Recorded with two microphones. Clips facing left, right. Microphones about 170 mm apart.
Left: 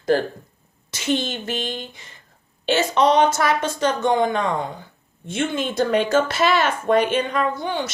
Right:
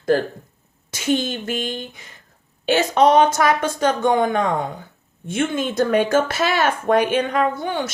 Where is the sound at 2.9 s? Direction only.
50° right (ahead or behind).